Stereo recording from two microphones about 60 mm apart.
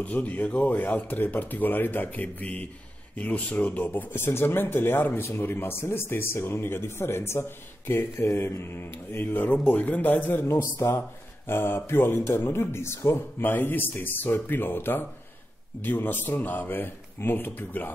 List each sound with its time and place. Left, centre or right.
0.0 s a man's voice: left
10.6 s speech: left
11.0 s speech: left
12.7 s speech: left
13.4 s speech: left